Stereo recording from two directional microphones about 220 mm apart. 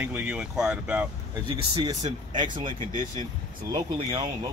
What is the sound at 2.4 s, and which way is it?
Speech, 20° right (ahead or behind).